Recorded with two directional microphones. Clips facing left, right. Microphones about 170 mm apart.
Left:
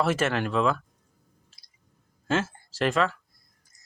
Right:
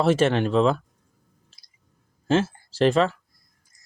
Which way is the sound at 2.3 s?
30° right (ahead or behind).